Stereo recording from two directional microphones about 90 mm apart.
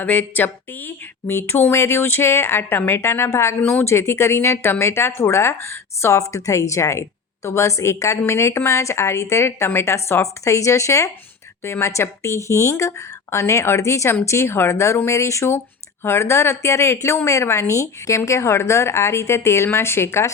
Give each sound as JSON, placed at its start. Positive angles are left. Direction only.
{"t": 0.0, "sound": "speech", "side_deg": 20}
{"t": 3.6, "sound": "speech", "side_deg": 15}
{"t": 3.8, "sound": "speech", "side_deg": 30}